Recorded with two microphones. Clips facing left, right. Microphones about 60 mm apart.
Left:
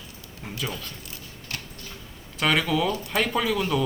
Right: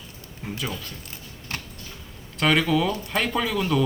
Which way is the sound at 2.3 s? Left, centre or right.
Centre.